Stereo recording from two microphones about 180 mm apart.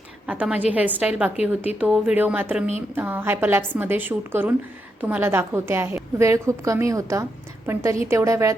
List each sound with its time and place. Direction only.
0.3 s a woman's voice: 5° right (ahead or behind)